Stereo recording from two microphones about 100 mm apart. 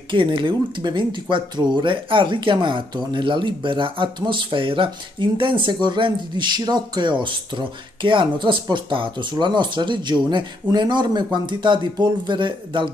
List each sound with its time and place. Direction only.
0.1 s speech: 55° right (ahead or behind)